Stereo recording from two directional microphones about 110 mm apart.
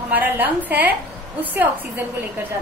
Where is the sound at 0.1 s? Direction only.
15° right (ahead or behind).